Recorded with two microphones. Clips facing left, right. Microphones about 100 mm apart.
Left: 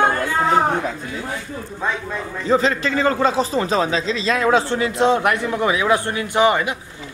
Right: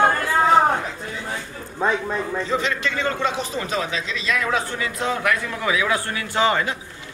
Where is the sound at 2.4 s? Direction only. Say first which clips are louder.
Left 6 dB; 35° left (ahead or behind).